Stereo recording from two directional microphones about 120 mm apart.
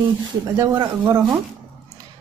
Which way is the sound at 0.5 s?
35° right (ahead or behind).